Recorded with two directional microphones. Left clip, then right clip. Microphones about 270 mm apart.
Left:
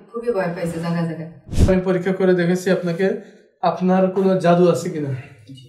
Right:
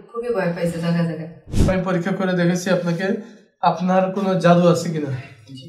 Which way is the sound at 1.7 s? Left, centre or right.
Right.